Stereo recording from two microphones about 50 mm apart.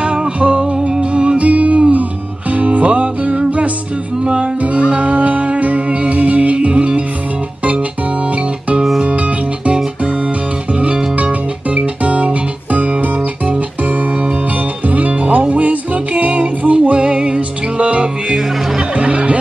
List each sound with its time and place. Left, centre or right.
0.0 s music: right
10.7 s guitar: right
14.9 s music: right